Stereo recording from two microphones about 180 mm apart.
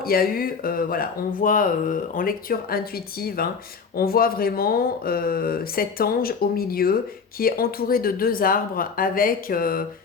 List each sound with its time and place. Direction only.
0.0 s speech: 55° left (ahead or behind)